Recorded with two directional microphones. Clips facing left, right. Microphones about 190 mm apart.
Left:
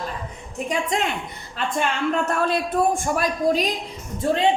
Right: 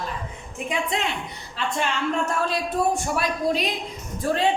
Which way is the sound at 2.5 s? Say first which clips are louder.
Left 3 dB; 50° left (ahead or behind).